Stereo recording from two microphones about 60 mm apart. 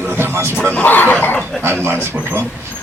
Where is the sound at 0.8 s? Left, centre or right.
Left.